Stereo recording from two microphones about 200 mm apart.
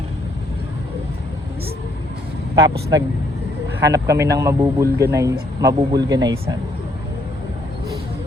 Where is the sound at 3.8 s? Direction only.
15° right (ahead or behind).